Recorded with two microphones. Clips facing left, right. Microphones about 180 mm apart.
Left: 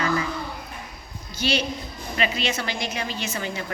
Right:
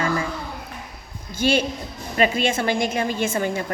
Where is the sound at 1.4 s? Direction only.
50° right (ahead or behind).